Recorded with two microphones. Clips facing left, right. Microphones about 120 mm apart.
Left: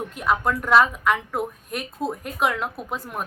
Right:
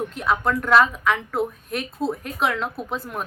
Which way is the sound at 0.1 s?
10° left (ahead or behind).